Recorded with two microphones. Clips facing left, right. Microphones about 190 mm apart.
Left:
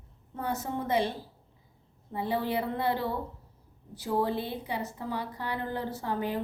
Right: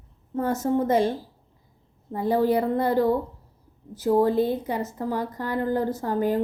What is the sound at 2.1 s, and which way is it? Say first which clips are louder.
A woman's voice: right 8 dB; 45° right (ahead or behind).